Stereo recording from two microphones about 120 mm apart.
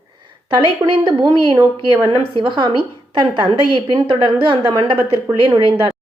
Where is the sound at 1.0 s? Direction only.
35° right (ahead or behind).